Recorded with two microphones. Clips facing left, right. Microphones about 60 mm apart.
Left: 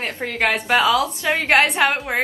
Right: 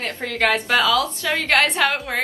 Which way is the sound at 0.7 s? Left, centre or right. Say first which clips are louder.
Left 1 dB; centre.